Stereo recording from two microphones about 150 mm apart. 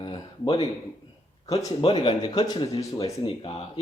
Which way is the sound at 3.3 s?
40° left (ahead or behind).